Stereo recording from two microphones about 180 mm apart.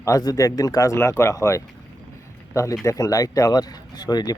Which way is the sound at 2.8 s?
15° left (ahead or behind).